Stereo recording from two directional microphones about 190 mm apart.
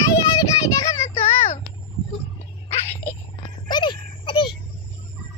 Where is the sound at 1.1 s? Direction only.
30° left (ahead or behind).